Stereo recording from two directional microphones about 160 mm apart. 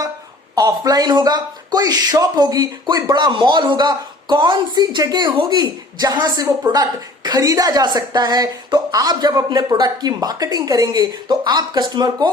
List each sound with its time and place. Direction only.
0.5 s speech: 25° right (ahead or behind)